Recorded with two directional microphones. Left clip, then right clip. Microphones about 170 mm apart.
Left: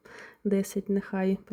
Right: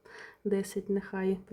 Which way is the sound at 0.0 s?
20° left (ahead or behind).